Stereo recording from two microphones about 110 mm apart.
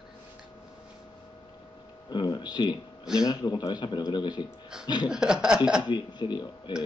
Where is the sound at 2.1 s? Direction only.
45° left (ahead or behind).